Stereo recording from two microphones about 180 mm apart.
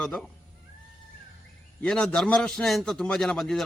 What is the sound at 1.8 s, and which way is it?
Speech, 5° left (ahead or behind).